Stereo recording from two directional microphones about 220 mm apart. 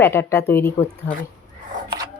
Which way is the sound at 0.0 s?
10° left (ahead or behind).